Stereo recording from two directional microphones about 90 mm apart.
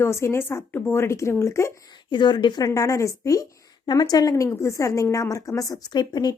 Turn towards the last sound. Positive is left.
turn(degrees=50)  # may be behind; listen again after turning